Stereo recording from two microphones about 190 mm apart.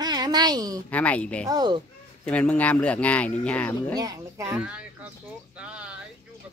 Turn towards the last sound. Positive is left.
turn(degrees=-5)  # may be behind; listen again after turning